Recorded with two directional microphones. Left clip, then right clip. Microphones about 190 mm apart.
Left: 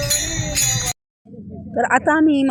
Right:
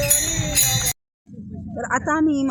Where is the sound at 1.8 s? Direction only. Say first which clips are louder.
Left 6 dB; 20° left (ahead or behind).